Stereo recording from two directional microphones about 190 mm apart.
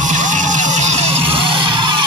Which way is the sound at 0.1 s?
40° right (ahead or behind).